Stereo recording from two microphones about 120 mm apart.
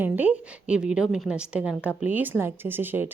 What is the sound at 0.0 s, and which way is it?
A woman's voice, 15° right (ahead or behind).